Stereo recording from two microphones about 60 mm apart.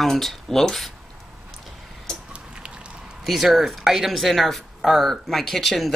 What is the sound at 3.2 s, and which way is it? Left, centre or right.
Speech, centre.